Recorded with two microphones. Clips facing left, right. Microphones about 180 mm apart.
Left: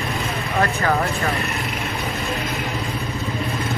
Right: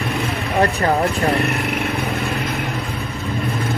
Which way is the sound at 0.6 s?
35° right (ahead or behind).